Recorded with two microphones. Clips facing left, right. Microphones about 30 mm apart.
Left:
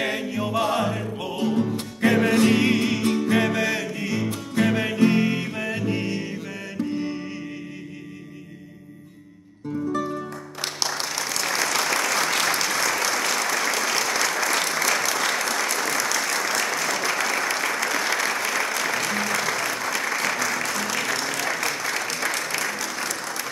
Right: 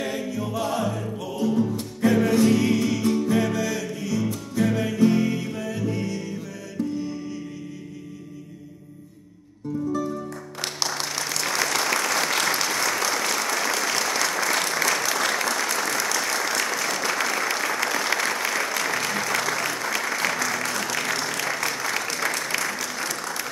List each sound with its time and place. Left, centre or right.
0.0 s music: left
10.6 s applause: centre